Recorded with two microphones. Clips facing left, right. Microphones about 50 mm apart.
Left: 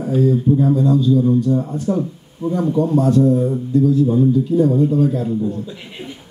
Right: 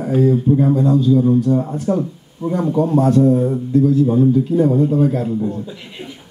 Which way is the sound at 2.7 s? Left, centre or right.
Right.